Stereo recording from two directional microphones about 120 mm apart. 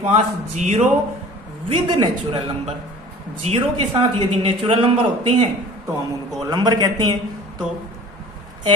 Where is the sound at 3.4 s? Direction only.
60° right (ahead or behind).